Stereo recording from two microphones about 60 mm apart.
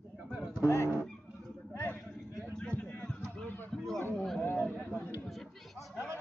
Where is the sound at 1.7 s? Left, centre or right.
Left.